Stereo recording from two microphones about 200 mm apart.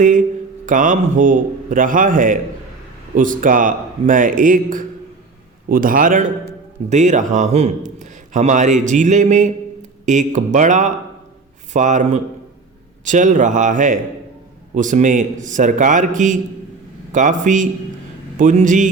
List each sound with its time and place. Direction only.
0.6 s a man's voice: 40° right (ahead or behind)